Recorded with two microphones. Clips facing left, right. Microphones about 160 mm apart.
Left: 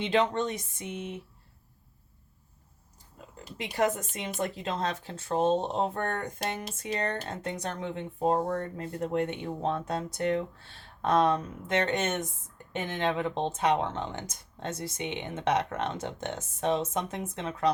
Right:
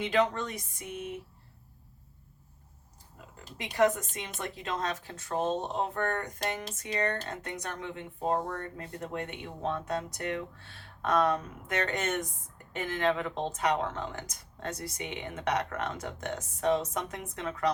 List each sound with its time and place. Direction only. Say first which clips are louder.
0.0 s speech: left 2 dB; 25° left (ahead or behind)
4.4 s speech: left 3 dB; 30° left (ahead or behind)